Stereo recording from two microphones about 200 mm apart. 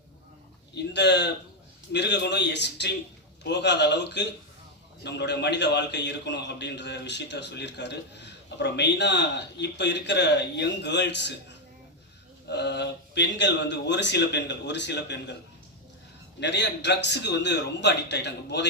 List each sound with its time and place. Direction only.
0.9 s a man's voice: 60° left (ahead or behind)
12.5 s a man's voice: 60° left (ahead or behind)
16.4 s a man's voice: 60° left (ahead or behind)